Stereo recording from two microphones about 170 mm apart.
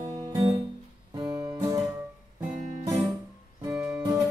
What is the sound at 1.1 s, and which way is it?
Guitar, 20° right (ahead or behind).